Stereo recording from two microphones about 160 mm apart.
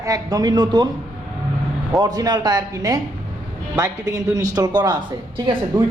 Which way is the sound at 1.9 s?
20° right (ahead or behind).